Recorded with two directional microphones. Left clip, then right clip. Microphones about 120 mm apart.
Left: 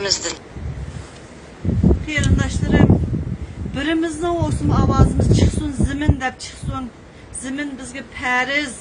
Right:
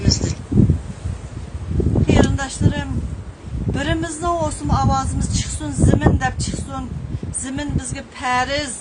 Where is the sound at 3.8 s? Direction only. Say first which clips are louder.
Left 3 dB; 30° right (ahead or behind).